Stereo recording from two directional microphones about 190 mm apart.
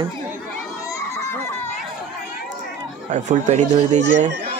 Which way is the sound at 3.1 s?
40° right (ahead or behind).